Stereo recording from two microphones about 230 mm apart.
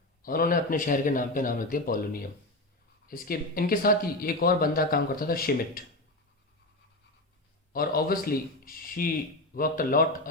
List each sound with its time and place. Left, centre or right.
0.3 s speech: left
7.7 s speech: left